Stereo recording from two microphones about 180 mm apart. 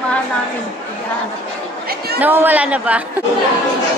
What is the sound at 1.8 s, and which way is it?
Chatter, 60° right (ahead or behind).